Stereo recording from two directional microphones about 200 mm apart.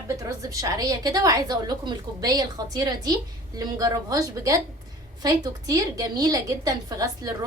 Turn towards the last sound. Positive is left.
turn(degrees=-15)  # may be behind; listen again after turning